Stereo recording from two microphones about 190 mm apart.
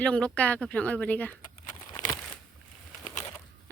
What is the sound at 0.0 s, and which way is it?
Speech, 5° left (ahead or behind).